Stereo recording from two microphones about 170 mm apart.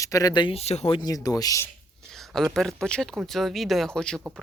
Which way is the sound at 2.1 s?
Centre (ahead or behind).